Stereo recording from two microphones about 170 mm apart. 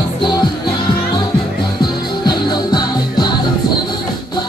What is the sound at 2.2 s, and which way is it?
Music, 25° left (ahead or behind).